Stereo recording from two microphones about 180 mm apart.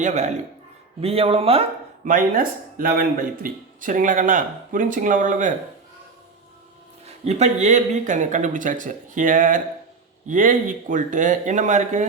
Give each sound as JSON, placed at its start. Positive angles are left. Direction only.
{"t": 0.0, "sound": "speech", "side_deg": -40}
{"t": 2.0, "sound": "speech", "side_deg": -50}
{"t": 7.3, "sound": "speech", "side_deg": -40}